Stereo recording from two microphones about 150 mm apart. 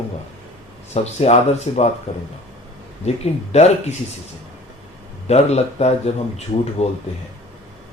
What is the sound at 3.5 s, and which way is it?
Speech, 45° left (ahead or behind).